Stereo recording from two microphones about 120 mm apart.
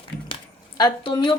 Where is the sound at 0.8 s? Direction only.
35° left (ahead or behind).